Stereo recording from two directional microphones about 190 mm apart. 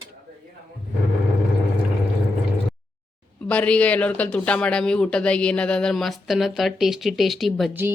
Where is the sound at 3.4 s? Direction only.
5° left (ahead or behind).